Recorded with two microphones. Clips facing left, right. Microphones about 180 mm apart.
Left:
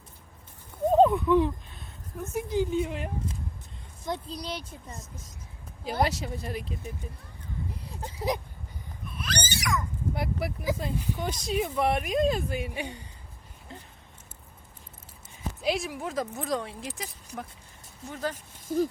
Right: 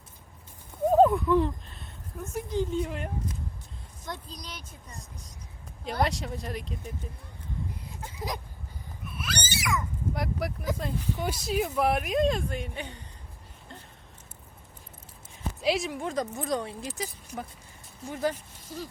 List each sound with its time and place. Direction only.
0.9 s speech: 5° right (ahead or behind)
4.3 s speech: 30° left (ahead or behind)
4.9 s speech: centre (ahead or behind)
9.0 s a sound: 5° right (ahead or behind)
11.2 s speech: 10° right (ahead or behind); by 13.0 s 10° left (ahead or behind)
15.6 s speech: centre (ahead or behind)
18.1 s speech: 10° right (ahead or behind)
18.7 s speech: 50° left (ahead or behind)